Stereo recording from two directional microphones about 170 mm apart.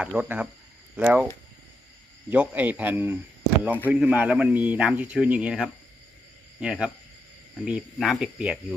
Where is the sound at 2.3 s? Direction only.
10° right (ahead or behind).